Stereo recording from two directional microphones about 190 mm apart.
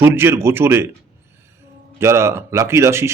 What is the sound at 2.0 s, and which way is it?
A man's voice, 15° right (ahead or behind).